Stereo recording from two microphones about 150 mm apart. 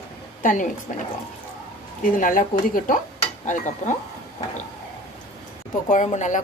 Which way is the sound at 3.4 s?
55° left (ahead or behind).